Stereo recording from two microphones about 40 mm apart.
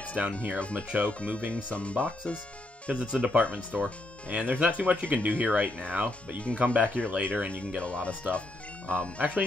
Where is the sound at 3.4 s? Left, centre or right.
Left.